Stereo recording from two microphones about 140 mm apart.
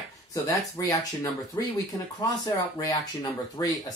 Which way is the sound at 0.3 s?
25° left (ahead or behind).